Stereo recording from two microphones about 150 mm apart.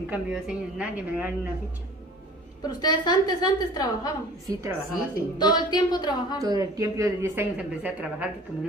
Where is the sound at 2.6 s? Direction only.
25° left (ahead or behind).